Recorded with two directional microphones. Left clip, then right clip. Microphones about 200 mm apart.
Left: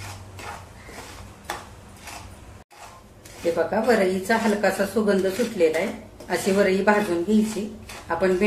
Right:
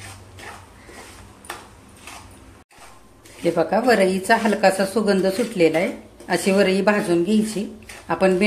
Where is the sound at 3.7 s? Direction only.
50° right (ahead or behind).